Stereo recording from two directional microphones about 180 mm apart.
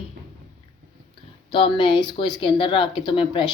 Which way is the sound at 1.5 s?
30° left (ahead or behind).